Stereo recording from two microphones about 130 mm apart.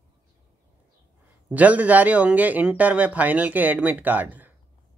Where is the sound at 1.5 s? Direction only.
10° right (ahead or behind).